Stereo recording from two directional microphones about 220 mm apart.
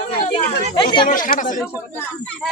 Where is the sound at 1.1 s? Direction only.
40° left (ahead or behind).